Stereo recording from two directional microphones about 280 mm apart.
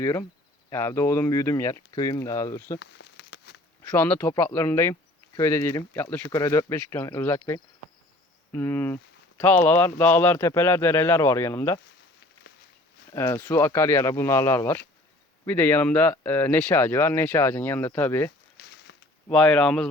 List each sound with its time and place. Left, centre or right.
0.0 s speech: centre
2.7 s a sound: left
3.9 s speech: centre
13.1 s speech: centre
18.6 s a sound: left
19.3 s speech: centre